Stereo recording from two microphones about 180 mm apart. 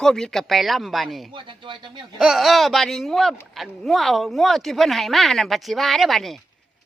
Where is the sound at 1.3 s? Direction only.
25° right (ahead or behind).